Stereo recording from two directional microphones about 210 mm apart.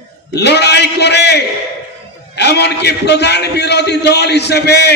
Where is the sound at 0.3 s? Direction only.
50° left (ahead or behind).